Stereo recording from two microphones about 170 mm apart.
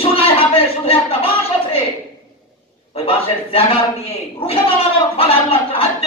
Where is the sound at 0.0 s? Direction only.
35° left (ahead or behind).